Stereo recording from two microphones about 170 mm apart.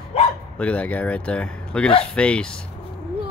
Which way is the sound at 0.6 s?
10° left (ahead or behind).